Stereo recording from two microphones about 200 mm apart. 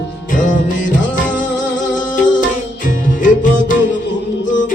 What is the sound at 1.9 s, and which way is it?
Music, 40° left (ahead or behind).